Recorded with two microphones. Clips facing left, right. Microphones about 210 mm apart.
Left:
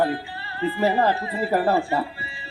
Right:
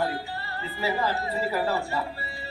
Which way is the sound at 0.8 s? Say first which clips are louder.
Left 6 dB; 55° left (ahead or behind).